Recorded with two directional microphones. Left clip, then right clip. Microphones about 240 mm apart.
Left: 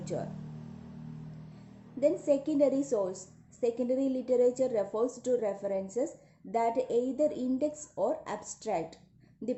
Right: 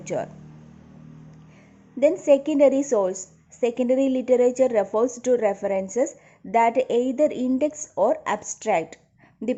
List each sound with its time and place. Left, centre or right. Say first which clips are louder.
0.0 s speech: right 9 dB; right
2.0 s a woman's voice: right 10 dB; right